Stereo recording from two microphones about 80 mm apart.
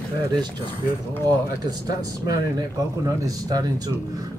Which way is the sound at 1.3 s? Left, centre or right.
Right.